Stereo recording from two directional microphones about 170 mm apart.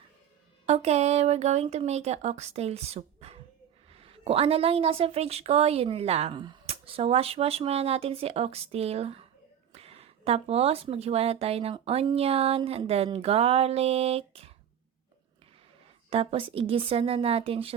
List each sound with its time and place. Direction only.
0.6 s a woman's voice: 40° right (ahead or behind)
16.0 s a woman's voice: 35° right (ahead or behind)